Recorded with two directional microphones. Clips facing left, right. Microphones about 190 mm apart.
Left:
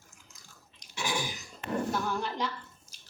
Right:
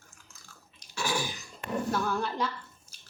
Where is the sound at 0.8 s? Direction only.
15° left (ahead or behind).